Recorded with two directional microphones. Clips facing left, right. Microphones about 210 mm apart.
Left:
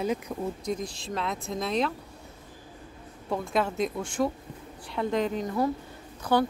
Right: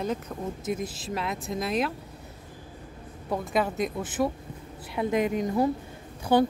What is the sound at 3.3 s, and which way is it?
A woman's voice, centre (ahead or behind).